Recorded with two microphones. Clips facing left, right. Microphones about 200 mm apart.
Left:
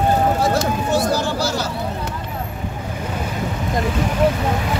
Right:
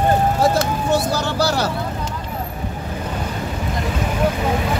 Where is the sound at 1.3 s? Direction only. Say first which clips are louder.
Right 3 dB; 65° right (ahead or behind).